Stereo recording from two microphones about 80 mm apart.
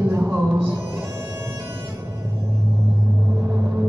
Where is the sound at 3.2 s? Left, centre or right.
Right.